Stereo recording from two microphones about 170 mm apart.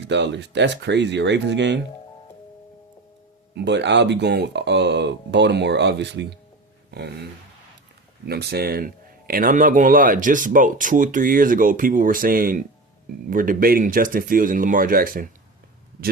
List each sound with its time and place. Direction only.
0.1 s speech: 90° right
3.5 s speech: 90° right
8.3 s speech: 70° right (ahead or behind)